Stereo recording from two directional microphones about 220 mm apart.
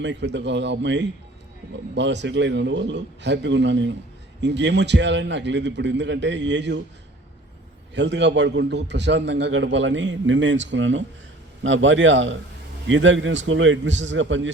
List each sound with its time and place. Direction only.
0.0 s a man's voice: 55° right (ahead or behind)
7.9 s a man's voice: 55° right (ahead or behind)